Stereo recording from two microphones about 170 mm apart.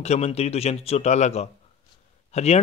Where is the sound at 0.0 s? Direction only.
40° left (ahead or behind).